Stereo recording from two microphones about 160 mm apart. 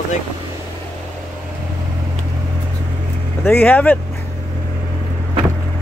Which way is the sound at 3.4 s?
10° left (ahead or behind).